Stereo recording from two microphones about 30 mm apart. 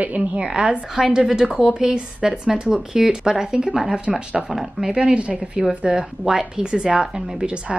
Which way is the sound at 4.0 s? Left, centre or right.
Right.